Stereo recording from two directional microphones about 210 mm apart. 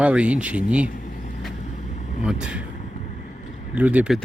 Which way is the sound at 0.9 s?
40° left (ahead or behind).